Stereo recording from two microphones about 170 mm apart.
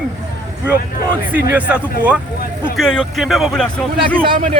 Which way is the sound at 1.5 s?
10° right (ahead or behind).